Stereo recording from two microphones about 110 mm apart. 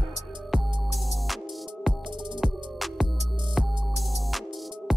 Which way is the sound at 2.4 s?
5° right (ahead or behind).